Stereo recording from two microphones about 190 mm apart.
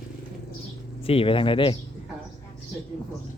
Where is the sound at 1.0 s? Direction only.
30° left (ahead or behind).